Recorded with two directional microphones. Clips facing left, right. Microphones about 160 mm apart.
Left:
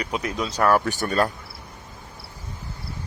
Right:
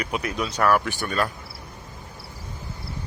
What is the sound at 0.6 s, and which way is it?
Speech, 35° left (ahead or behind).